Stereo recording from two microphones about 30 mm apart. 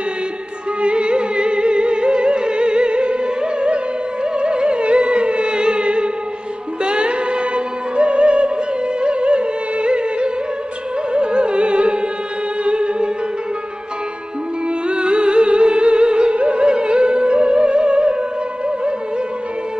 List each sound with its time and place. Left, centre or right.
0.7 s music: right
14.9 s music: right